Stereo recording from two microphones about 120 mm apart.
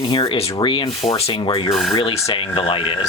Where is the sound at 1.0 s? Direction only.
60° left (ahead or behind).